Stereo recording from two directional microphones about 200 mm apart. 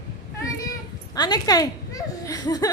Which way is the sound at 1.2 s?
20° left (ahead or behind).